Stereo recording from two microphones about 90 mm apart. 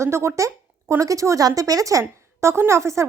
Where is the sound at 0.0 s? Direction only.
30° right (ahead or behind).